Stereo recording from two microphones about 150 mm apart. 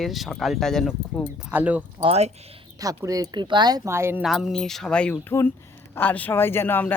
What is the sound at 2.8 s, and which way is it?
Speech, 25° right (ahead or behind).